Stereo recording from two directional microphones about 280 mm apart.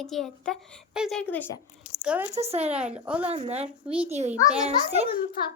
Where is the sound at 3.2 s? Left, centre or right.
Right.